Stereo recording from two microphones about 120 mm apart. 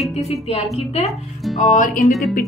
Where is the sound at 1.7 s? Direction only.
90° left.